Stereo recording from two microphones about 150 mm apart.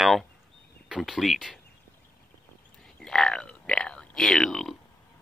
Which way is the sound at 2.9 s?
5° left (ahead or behind).